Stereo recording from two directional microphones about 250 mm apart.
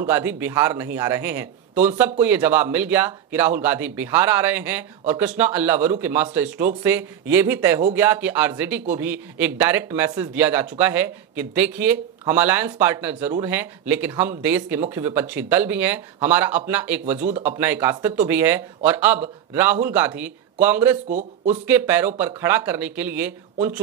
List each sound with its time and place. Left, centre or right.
0.0 s a man's voice: centre
21.1 s speech: right
21.6 s a man's voice: centre